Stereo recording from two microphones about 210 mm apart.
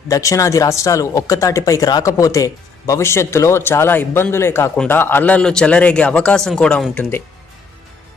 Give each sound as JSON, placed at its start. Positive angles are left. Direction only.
{"t": 0.1, "sound": "speech", "side_deg": 15}